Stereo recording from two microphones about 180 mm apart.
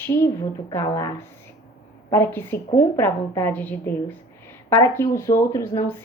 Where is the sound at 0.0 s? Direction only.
15° left (ahead or behind).